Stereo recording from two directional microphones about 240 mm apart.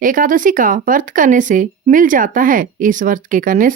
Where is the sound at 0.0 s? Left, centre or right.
Right.